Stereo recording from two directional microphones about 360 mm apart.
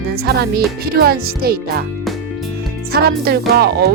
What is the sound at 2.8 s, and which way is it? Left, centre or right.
Music, right.